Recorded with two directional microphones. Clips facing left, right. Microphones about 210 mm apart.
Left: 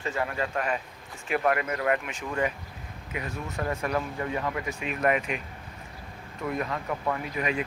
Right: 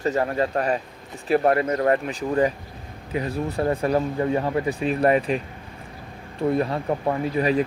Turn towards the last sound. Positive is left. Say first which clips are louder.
# right 8 dB
turn(degrees=-35)  # may be behind; listen again after turning